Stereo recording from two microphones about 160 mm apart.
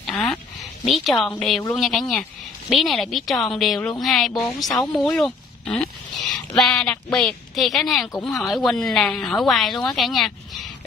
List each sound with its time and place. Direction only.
0.0 s a woman's voice: centre (ahead or behind)